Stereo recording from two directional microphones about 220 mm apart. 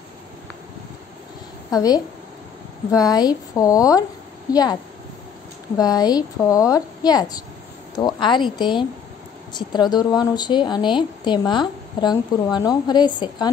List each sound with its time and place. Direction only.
1.7 s a woman's voice: 15° left (ahead or behind)
5.8 s a woman's voice: 15° left (ahead or behind)